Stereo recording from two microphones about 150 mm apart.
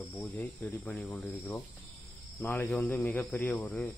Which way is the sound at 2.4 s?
15° left (ahead or behind).